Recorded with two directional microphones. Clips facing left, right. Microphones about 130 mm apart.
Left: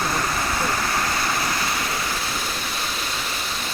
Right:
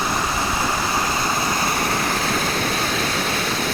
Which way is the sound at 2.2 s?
65° right (ahead or behind).